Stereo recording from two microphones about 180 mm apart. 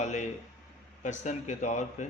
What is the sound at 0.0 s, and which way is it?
Speech, 40° left (ahead or behind).